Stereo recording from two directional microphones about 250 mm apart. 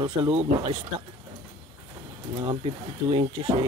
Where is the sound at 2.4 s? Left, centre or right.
Right.